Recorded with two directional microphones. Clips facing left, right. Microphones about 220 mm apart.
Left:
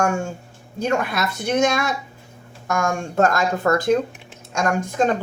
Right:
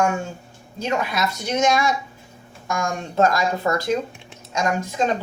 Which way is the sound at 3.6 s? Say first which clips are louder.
Left 4 dB; 50° left (ahead or behind).